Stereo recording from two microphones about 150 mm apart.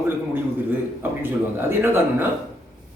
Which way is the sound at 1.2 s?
15° right (ahead or behind).